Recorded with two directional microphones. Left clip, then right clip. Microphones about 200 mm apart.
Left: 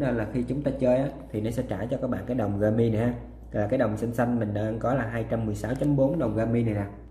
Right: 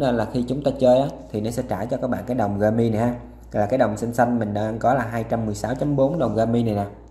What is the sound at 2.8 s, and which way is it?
Speech, 15° left (ahead or behind).